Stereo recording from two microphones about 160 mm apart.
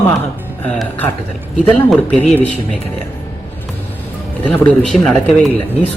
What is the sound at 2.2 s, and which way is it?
Speech, 10° left (ahead or behind).